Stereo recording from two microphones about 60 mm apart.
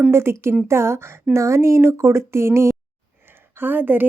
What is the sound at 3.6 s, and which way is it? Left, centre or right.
Speech, right.